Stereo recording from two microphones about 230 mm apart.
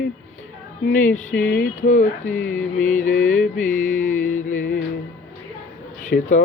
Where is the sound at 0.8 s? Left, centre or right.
Left.